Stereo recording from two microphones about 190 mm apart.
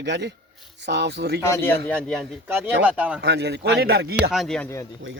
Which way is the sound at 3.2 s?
60° right (ahead or behind).